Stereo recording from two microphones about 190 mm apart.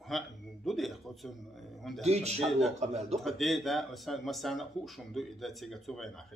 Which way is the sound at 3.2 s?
Centre (ahead or behind).